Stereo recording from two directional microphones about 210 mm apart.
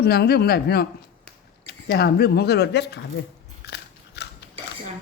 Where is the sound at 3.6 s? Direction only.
50° left (ahead or behind).